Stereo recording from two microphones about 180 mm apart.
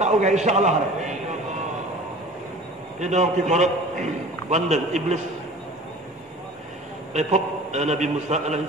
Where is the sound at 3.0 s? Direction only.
40° right (ahead or behind).